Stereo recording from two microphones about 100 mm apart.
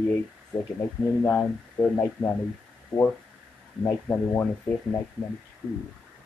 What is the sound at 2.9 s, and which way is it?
Speech, 20° left (ahead or behind).